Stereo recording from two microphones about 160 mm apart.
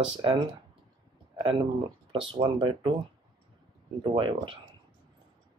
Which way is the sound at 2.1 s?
35° right (ahead or behind).